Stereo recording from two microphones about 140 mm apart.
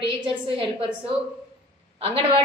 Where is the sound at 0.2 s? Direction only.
40° right (ahead or behind).